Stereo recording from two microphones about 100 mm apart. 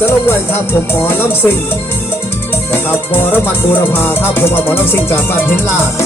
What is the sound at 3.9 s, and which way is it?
Music, 20° left (ahead or behind).